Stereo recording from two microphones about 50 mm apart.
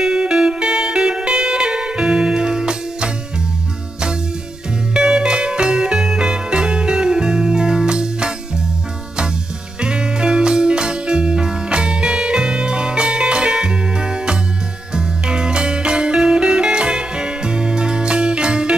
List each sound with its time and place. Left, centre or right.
0.0 s music: centre
4.9 s music: centre
9.8 s music: centre